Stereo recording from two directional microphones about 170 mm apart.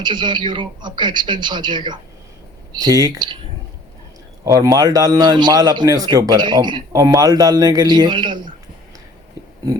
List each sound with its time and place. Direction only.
0.0 s a man's voice: 25° right (ahead or behind)
4.4 s a man's voice: 20° right (ahead or behind)